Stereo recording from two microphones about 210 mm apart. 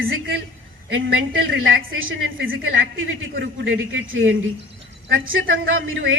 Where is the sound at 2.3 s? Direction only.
65° right (ahead or behind).